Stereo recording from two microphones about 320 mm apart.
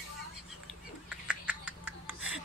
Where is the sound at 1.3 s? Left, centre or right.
Centre.